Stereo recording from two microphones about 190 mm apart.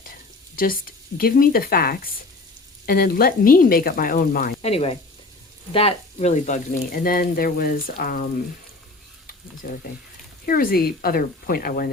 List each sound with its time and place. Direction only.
0.5 s speech: 50° left (ahead or behind)
4.6 s speech: 30° left (ahead or behind); by 8.3 s 50° left (ahead or behind)
9.6 s speech: 45° left (ahead or behind)